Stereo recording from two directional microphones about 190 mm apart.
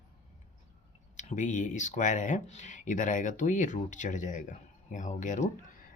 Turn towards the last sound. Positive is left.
turn(degrees=40)  # may be behind; listen again after turning